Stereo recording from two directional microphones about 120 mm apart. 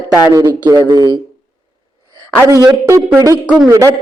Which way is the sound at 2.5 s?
25° right (ahead or behind).